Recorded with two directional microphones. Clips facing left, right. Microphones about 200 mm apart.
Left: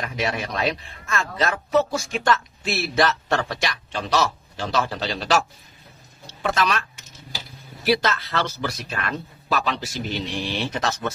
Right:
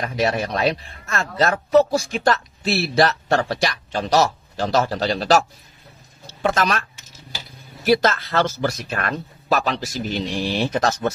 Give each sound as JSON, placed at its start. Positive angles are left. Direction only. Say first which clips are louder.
{"t": 0.0, "sound": "speech", "louder": "right 5 dB", "side_deg": -40}
{"t": 6.5, "sound": "speech", "louder": "even", "side_deg": -45}
{"t": 7.8, "sound": "speech", "louder": "right 4 dB", "side_deg": -45}